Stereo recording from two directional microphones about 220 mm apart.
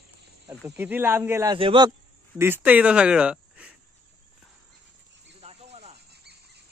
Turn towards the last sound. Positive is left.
turn(degrees=-25)  # may be behind; listen again after turning